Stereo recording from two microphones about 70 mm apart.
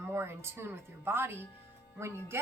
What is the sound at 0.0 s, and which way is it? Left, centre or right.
A woman's voice, right.